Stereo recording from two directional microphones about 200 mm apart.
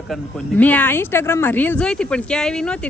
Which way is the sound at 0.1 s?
5° left (ahead or behind).